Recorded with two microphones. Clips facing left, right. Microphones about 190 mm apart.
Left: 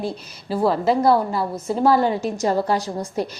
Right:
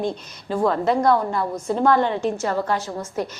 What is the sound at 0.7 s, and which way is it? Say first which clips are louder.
A woman's voice: left 2 dB; 5° left (ahead or behind).